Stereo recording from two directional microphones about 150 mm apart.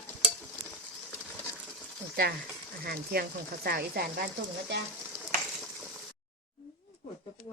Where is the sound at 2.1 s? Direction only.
90° right.